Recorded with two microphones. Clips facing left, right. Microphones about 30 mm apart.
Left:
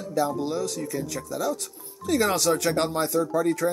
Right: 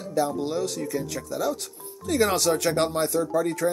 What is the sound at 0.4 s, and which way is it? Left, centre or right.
Speech, centre.